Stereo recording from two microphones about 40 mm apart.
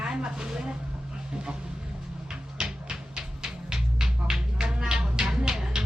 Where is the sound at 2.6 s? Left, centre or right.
Right.